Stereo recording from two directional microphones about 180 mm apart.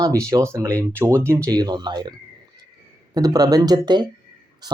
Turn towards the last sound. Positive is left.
turn(degrees=-25)  # may be behind; listen again after turning